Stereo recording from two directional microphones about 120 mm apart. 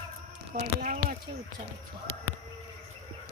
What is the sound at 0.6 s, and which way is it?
Speech, 90° right.